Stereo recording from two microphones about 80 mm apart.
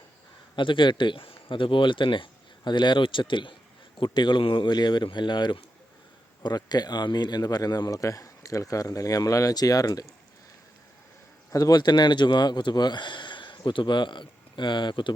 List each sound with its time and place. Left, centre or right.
0.5 s speech: left
4.0 s speech: left
6.4 s speech: left
11.5 s speech: left
11.8 s speech: left